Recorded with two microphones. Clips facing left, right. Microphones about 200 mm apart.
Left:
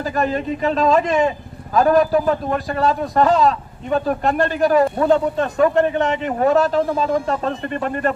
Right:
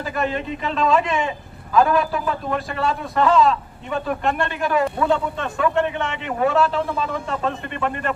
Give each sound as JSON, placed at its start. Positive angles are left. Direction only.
{"t": 0.0, "sound": "a man's voice", "side_deg": 40}